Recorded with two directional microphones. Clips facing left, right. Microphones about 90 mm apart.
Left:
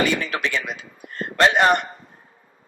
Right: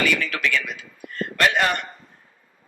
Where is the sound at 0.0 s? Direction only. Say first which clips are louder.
Left 1 dB; 25° left (ahead or behind).